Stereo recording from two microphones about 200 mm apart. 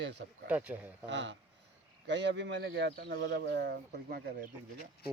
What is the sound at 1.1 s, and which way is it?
Speech, 65° right (ahead or behind).